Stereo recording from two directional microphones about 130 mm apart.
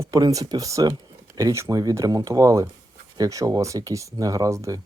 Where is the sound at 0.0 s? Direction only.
25° right (ahead or behind).